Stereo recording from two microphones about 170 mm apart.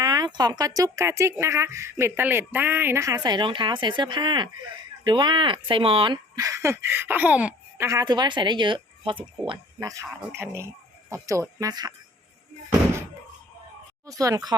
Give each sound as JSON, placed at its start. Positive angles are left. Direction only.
{"t": 0.0, "sound": "speech", "side_deg": -25}
{"t": 3.2, "sound": "a woman's voice", "side_deg": -25}
{"t": 6.3, "sound": "speech", "side_deg": -20}
{"t": 7.9, "sound": "a woman's voice", "side_deg": -20}
{"t": 14.1, "sound": "a woman's voice", "side_deg": -20}